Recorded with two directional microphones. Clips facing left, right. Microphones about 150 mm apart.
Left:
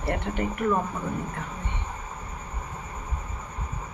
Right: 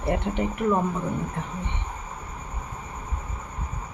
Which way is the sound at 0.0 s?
20° right (ahead or behind).